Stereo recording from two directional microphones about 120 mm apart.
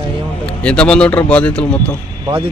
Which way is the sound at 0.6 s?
10° left (ahead or behind).